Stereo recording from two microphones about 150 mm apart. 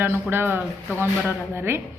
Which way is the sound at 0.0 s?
15° right (ahead or behind).